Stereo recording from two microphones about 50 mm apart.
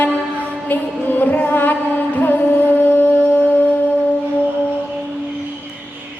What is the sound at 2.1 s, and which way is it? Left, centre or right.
Carnatic music, left.